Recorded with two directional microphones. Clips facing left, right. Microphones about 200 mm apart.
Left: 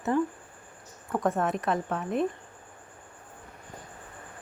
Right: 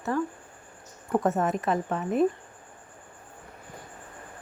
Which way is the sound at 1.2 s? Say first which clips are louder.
Left 1 dB; 5° right (ahead or behind).